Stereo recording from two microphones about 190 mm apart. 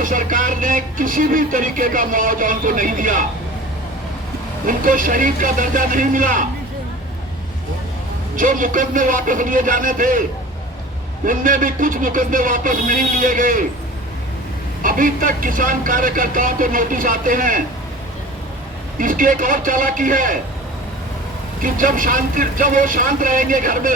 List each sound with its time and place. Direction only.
0.0 s speech: 45° right (ahead or behind)
4.6 s speech: 45° right (ahead or behind)
8.4 s speech: 45° right (ahead or behind)
11.3 s speech: 45° right (ahead or behind)
14.8 s speech: 45° right (ahead or behind)
18.9 s speech: 45° right (ahead or behind)
21.6 s speech: 45° right (ahead or behind)